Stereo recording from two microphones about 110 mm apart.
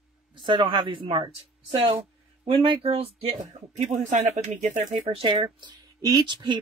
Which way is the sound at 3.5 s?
90° right.